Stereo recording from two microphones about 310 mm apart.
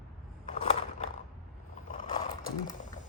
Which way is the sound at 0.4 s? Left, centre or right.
Left.